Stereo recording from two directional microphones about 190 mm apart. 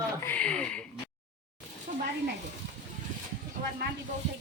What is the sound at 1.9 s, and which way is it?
Speech, 45° right (ahead or behind).